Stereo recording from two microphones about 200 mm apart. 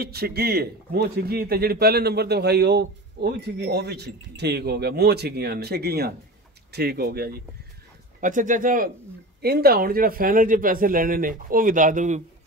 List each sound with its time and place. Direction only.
0.0 s speech: 50° right (ahead or behind)
8.2 s speech: 40° right (ahead or behind)